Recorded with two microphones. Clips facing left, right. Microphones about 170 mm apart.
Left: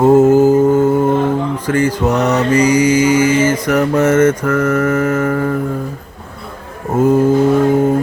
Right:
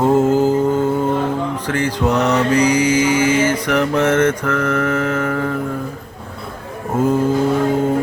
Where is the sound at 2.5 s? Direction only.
50° left (ahead or behind).